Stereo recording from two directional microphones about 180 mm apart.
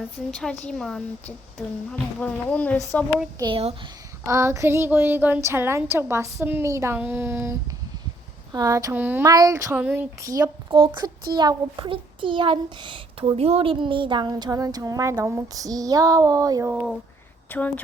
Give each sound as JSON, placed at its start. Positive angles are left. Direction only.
{"t": 0.3, "sound": "speech", "side_deg": 5}
{"t": 3.3, "sound": "a child's voice", "side_deg": -25}
{"t": 4.3, "sound": "a woman's voice", "side_deg": -15}
{"t": 8.5, "sound": "a woman's voice", "side_deg": -20}
{"t": 10.7, "sound": "a child's voice", "side_deg": -30}
{"t": 17.5, "sound": "speech", "side_deg": 10}